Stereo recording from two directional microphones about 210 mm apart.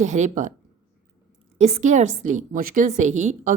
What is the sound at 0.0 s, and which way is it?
Speech, 35° right (ahead or behind).